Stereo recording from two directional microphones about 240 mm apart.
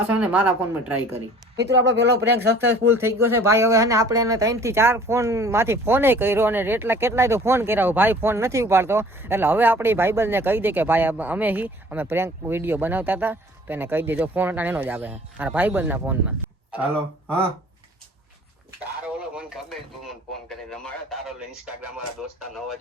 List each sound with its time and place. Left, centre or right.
0.1 s speech: centre
1.5 s speech: right
2.8 s speech: centre
19.3 s a man's voice: centre